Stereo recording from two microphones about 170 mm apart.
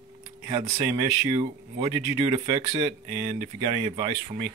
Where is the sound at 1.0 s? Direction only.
30° right (ahead or behind).